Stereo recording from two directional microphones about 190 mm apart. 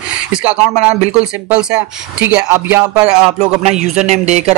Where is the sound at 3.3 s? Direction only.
35° right (ahead or behind).